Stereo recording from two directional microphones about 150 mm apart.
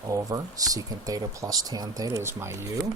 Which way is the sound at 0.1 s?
25° right (ahead or behind).